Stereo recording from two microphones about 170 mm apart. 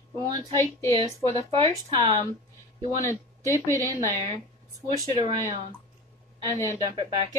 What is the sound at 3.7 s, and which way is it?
Speech, 20° right (ahead or behind).